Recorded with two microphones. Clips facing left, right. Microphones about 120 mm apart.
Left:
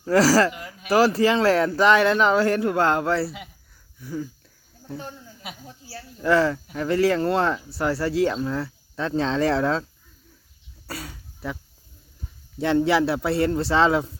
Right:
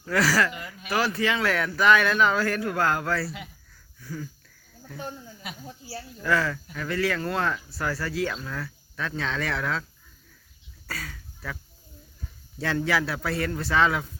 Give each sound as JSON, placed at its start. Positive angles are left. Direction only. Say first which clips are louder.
{"t": 0.0, "sound": "speech", "louder": "left 6 dB", "side_deg": 35}
{"t": 6.2, "sound": "speech", "louder": "left 6 dB", "side_deg": 25}
{"t": 10.8, "sound": "throat clearing", "louder": "left 2 dB", "side_deg": 25}
{"t": 12.5, "sound": "speech", "louder": "left 6 dB", "side_deg": 25}